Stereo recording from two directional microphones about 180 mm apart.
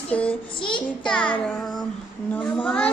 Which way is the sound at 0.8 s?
5° left (ahead or behind).